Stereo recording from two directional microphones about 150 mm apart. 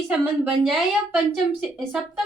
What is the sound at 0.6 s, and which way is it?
A woman's voice, centre (ahead or behind).